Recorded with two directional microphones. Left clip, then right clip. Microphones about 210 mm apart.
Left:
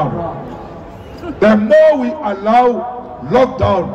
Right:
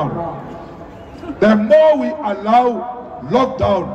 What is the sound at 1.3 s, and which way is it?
A man's voice, 5° right (ahead or behind).